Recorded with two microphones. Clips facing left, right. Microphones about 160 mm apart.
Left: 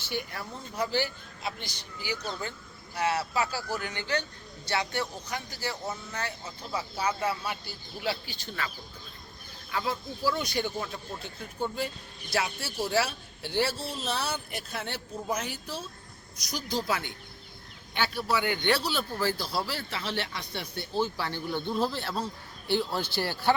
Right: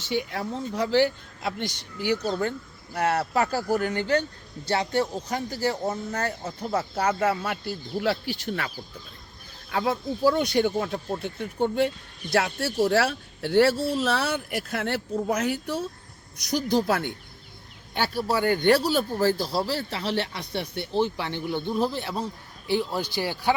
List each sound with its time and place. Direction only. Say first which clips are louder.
0.1 s a man's voice: right 8 dB; 70° right (ahead or behind)
2.4 s speech: right 10 dB; 55° right (ahead or behind); by 5.7 s 35° right (ahead or behind)
5.8 s speech: right 7 dB; 45° right (ahead or behind)
7.9 s speech: right 8 dB; 90° right
8.3 s speech: right 7 dB; 75° right (ahead or behind)
9.7 s speech: right 6 dB; 60° right (ahead or behind)
17.9 s speech: right 4 dB; 40° right (ahead or behind); by 23.6 s 10° right (ahead or behind)